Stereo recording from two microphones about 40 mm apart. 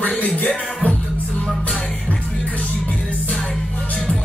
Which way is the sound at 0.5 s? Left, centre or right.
Centre.